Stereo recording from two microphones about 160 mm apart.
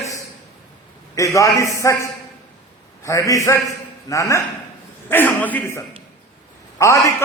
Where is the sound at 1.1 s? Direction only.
20° left (ahead or behind).